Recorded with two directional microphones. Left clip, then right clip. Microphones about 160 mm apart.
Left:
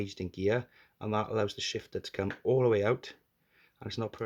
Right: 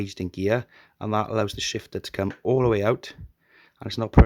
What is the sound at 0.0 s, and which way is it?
Speech, 50° right (ahead or behind).